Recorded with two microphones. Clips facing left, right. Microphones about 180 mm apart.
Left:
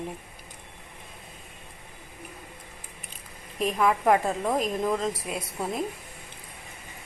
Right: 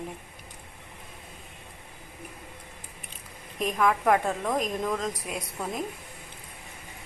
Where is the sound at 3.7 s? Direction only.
15° left (ahead or behind).